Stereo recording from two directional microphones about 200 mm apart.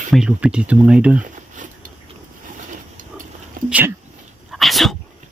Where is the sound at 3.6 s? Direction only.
45° right (ahead or behind).